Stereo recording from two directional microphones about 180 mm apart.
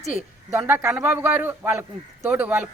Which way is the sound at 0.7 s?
15° right (ahead or behind).